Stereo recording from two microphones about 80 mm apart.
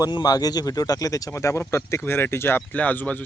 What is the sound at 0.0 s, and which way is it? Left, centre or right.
Speech, left.